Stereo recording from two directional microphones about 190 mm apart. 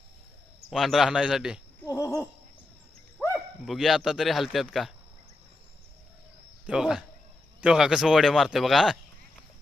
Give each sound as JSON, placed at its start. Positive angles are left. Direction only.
{"t": 0.7, "sound": "speech", "side_deg": 0}
{"t": 1.8, "sound": "a sound", "side_deg": 15}
{"t": 3.2, "sound": "speech", "side_deg": 5}
{"t": 6.7, "sound": "speech", "side_deg": -5}